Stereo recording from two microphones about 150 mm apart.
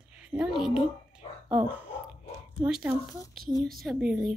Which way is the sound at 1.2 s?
40° left (ahead or behind).